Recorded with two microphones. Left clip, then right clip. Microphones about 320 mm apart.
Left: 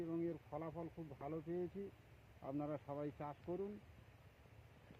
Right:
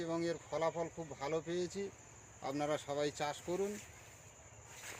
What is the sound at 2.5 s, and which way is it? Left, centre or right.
Speech, centre.